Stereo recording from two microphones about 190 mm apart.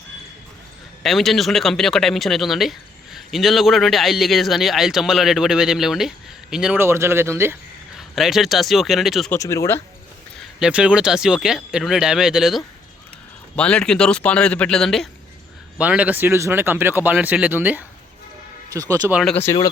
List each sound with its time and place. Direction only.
1.0 s speech: centre (ahead or behind)
7.9 s speech: centre (ahead or behind)
9.3 s speech: 15° left (ahead or behind)
10.6 s speech: 5° right (ahead or behind)
19.1 s speech: centre (ahead or behind)
19.4 s speech: 20° left (ahead or behind)